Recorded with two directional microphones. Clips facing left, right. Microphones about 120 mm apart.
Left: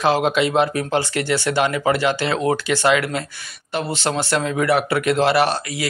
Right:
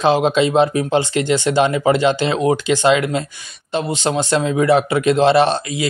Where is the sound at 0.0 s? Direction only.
20° right (ahead or behind).